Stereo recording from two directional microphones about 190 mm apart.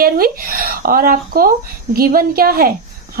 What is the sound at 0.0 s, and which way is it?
A woman's voice, 50° right (ahead or behind).